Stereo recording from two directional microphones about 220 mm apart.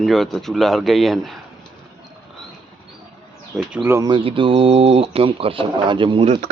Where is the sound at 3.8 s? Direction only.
15° right (ahead or behind).